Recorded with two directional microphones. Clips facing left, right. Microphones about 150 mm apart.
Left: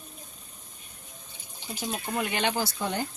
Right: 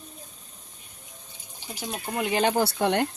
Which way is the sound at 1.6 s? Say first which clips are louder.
Left 1 dB; 10° right (ahead or behind).